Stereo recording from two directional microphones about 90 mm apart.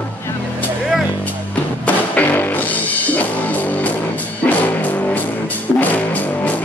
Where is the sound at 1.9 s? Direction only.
20° left (ahead or behind).